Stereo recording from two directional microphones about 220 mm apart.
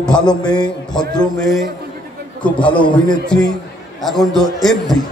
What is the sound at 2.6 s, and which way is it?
Speech, 20° left (ahead or behind).